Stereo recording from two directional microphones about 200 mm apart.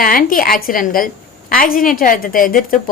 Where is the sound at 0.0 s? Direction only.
45° left (ahead or behind).